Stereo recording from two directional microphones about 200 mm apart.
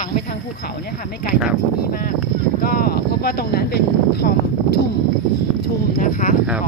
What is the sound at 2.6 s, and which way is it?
Speech, 45° left (ahead or behind).